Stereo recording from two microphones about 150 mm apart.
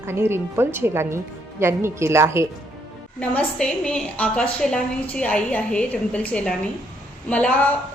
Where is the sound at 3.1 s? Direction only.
5° left (ahead or behind).